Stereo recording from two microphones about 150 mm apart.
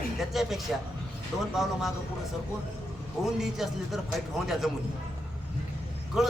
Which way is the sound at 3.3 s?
Centre (ahead or behind).